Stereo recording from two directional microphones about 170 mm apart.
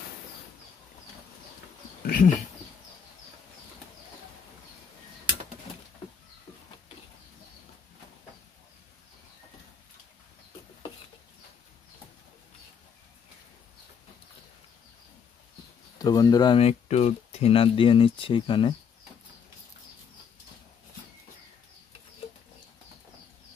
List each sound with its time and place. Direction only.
2.0 s speech: 50° left (ahead or behind)
16.0 s speech: 20° left (ahead or behind)